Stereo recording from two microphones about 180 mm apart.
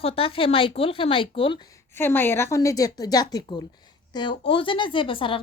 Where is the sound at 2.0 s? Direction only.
10° left (ahead or behind).